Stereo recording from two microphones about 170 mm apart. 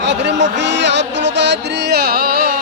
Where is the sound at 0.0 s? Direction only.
90° right; by 2.6 s 60° right (ahead or behind).